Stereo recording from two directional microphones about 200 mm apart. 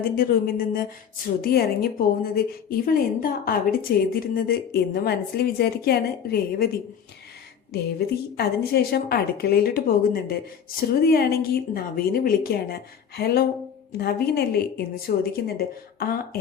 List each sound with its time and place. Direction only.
0.0 s a woman's voice: 45° left (ahead or behind)
7.7 s a woman's voice: 50° left (ahead or behind)